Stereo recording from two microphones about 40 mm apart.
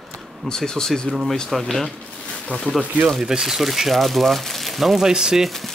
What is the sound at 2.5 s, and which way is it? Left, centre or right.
Speech, left.